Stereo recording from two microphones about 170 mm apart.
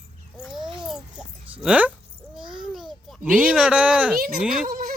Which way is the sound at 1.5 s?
10° right (ahead or behind).